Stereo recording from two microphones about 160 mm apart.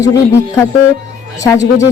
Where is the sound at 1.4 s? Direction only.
20° left (ahead or behind).